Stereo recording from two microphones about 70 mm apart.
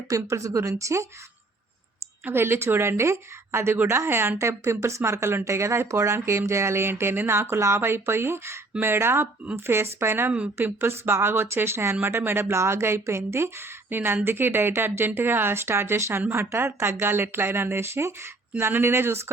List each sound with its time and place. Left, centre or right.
0.1 s speech: right
2.2 s speech: right
10.3 s speech: right